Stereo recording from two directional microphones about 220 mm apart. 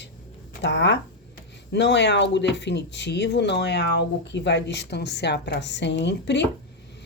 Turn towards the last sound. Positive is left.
turn(degrees=50)  # may be behind; listen again after turning